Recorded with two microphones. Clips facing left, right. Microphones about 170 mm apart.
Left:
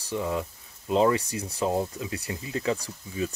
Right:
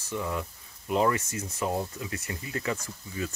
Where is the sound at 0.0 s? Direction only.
25° left (ahead or behind).